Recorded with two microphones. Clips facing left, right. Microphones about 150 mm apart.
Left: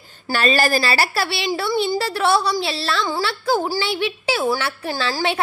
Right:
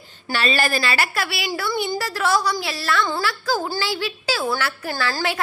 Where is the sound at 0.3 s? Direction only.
40° left (ahead or behind).